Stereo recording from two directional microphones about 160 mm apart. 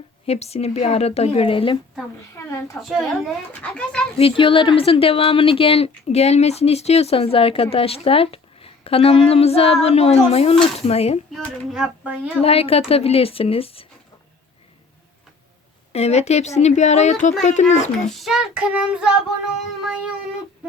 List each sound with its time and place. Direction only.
0.3 s a woman's voice: 40° left (ahead or behind)
2.8 s a woman's voice: 15° left (ahead or behind)
3.5 s child singing: 5° left (ahead or behind)
4.2 s a woman's voice: 35° left (ahead or behind)
11.3 s child singing: 5° right (ahead or behind)
12.4 s a woman's voice: 35° left (ahead or behind)
15.9 s speech: 40° left (ahead or behind)
18.1 s child singing: centre (ahead or behind)